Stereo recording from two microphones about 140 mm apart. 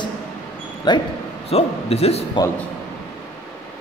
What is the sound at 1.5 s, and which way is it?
Speech, 45° left (ahead or behind).